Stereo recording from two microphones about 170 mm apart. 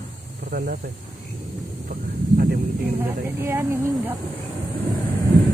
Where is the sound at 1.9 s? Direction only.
60° right (ahead or behind).